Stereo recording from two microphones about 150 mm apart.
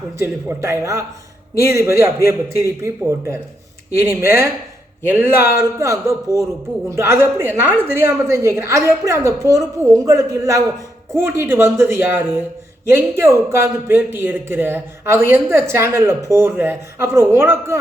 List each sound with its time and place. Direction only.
0.2 s a woman's voice: 15° right (ahead or behind)